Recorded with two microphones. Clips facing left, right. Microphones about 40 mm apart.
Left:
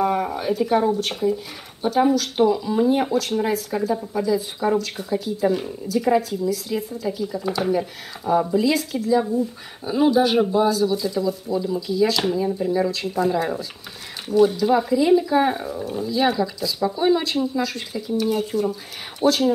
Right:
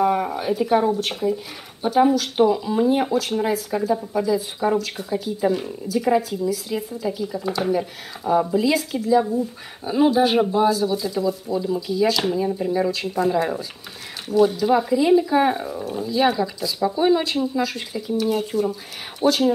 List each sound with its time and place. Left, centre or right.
0.0 s speech: centre